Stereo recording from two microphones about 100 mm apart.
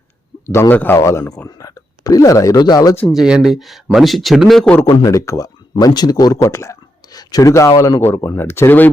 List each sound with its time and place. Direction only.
0.4 s speech: 25° left (ahead or behind)
1.5 s speech: 35° left (ahead or behind)
3.1 s speech: 5° right (ahead or behind)
5.0 s speech: 35° left (ahead or behind)
5.8 s speech: 45° left (ahead or behind); by 8.9 s 20° left (ahead or behind)